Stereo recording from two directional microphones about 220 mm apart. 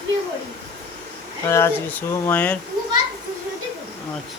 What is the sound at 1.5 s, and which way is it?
Speech, 10° left (ahead or behind).